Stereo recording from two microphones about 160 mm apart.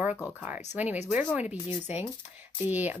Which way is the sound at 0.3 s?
10° right (ahead or behind).